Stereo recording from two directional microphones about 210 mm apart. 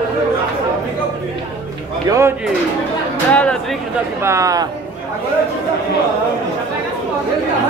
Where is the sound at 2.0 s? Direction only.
15° right (ahead or behind).